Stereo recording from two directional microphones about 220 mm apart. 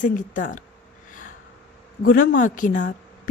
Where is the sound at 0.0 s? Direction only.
35° left (ahead or behind).